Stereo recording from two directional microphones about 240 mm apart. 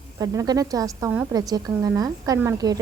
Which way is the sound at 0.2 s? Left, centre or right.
Centre.